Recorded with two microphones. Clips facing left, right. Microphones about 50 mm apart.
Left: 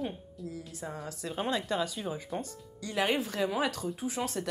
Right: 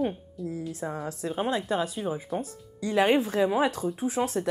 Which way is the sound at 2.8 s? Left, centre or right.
Right.